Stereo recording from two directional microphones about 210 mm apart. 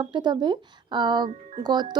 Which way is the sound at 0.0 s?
20° right (ahead or behind).